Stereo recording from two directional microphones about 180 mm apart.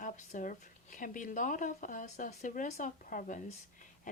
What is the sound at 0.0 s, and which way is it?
Speech, 45° left (ahead or behind).